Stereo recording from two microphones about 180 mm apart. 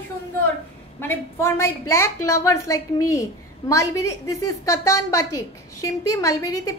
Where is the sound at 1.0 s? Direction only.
15° left (ahead or behind).